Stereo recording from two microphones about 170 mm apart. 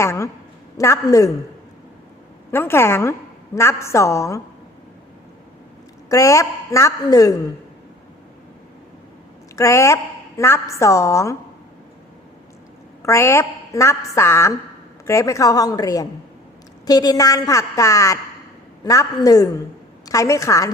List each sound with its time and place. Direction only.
0.0 s a woman's voice: 15° left (ahead or behind)
2.5 s a woman's voice: 15° left (ahead or behind)
6.1 s a woman's voice: 20° left (ahead or behind)
9.6 s a woman's voice: 20° left (ahead or behind)
13.0 s a woman's voice: 15° left (ahead or behind)